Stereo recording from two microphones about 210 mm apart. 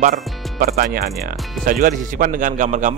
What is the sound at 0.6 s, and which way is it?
A man's voice, 45° right (ahead or behind).